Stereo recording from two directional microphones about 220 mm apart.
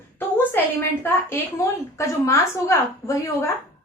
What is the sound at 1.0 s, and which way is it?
A woman's voice, 10° left (ahead or behind).